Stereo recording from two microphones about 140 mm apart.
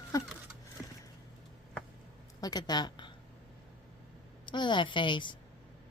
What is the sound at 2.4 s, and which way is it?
Speech, 30° left (ahead or behind).